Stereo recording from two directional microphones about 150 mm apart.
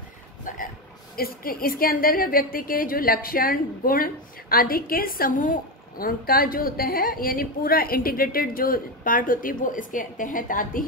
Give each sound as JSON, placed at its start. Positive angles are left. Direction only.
{"t": 0.5, "sound": "hiccup", "side_deg": 60}
{"t": 1.1, "sound": "a woman's voice", "side_deg": 75}